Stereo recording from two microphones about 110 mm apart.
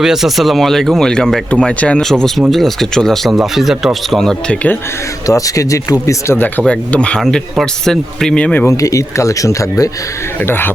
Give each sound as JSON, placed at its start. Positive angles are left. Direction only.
{"t": 0.0, "sound": "speech", "side_deg": -5}
{"t": 5.2, "sound": "speech", "side_deg": 30}
{"t": 6.6, "sound": "speech", "side_deg": 10}
{"t": 8.6, "sound": "speech", "side_deg": 30}
{"t": 10.4, "sound": "speech", "side_deg": 20}